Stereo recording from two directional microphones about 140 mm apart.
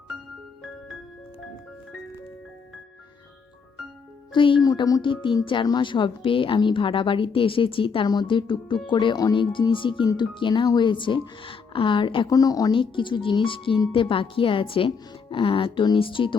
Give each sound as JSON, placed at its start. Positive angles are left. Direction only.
{"t": 4.3, "sound": "speech", "side_deg": 35}
{"t": 4.7, "sound": "speech", "side_deg": 25}
{"t": 12.7, "sound": "speech", "side_deg": 35}